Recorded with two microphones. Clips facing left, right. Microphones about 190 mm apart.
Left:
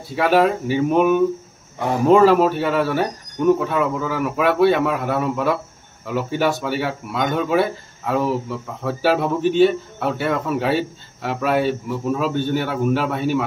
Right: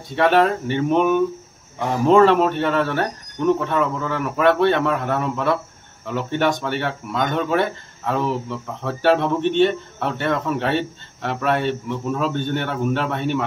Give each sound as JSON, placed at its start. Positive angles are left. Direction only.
{"t": 0.1, "sound": "speech", "side_deg": 5}